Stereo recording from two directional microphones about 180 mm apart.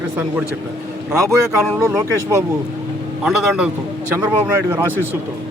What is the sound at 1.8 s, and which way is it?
Speech, 15° right (ahead or behind).